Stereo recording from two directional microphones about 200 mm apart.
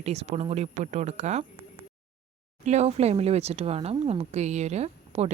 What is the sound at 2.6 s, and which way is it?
Speech, 35° right (ahead or behind).